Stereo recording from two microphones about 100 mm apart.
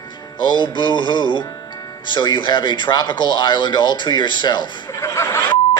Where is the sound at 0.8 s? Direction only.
50° left (ahead or behind).